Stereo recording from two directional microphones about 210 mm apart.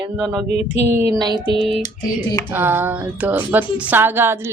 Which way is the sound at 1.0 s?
20° right (ahead or behind).